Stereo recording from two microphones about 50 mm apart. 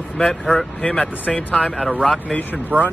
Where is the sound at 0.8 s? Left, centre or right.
Centre.